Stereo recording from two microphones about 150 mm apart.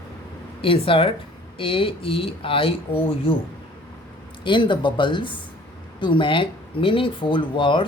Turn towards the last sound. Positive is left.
turn(degrees=35)  # may be behind; listen again after turning